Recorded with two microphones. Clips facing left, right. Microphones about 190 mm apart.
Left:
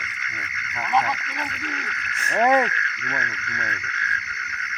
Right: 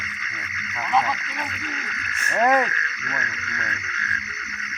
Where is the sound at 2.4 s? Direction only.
20° left (ahead or behind).